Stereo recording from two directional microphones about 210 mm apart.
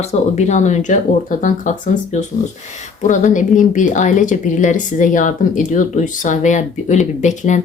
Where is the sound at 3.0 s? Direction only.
35° left (ahead or behind).